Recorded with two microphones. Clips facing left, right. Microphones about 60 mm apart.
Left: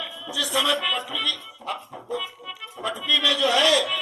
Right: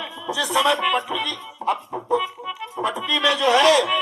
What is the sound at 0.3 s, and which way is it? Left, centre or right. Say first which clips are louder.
Speech: right 4 dB; right.